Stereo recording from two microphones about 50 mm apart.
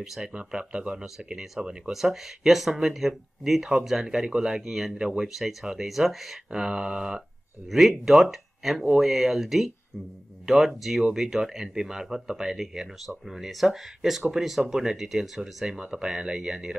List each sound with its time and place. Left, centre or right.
0.2 s speech: right
1.0 s speech: centre
5.2 s speech: centre
6.5 s speech: centre
7.7 s speech: centre